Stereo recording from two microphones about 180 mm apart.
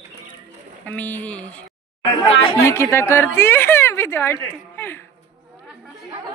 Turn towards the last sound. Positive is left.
turn(degrees=10)  # may be behind; listen again after turning